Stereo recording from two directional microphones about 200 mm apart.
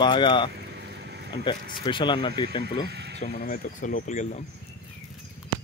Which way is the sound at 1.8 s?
25° left (ahead or behind).